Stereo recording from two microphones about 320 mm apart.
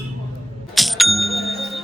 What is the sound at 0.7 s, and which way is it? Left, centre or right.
Bicycle bell, centre.